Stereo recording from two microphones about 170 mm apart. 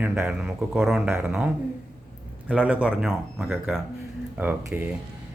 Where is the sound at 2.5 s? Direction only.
10° right (ahead or behind).